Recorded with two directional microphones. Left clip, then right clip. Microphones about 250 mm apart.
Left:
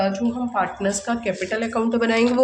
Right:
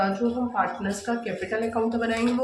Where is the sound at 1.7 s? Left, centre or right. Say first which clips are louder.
Left 8 dB; left.